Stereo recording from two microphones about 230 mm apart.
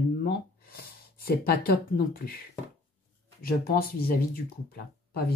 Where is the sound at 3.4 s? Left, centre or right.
Left.